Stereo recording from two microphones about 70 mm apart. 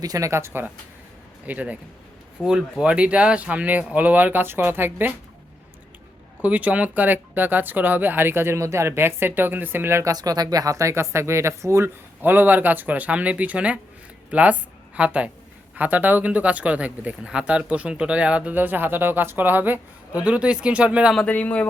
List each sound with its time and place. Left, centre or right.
0.0 s speech: right
0.3 s speech: right
1.5 s speech: right
6.4 s speech: right
10.0 s speech: right
12.2 s speech: right
21.2 s speech: left